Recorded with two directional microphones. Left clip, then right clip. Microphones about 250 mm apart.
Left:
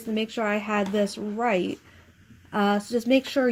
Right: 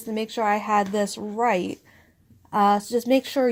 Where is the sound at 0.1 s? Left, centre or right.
Right.